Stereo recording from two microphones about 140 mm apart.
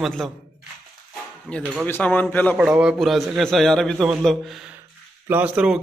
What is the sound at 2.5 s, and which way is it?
A man's voice, 5° right (ahead or behind).